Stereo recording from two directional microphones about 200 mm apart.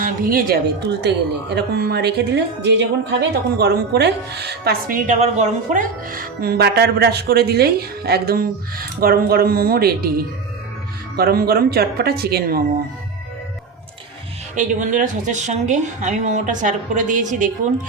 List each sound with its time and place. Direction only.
0.0 s a woman's voice: 45° right (ahead or behind)
11.2 s a woman's voice: 50° right (ahead or behind)
14.5 s speech: 40° right (ahead or behind)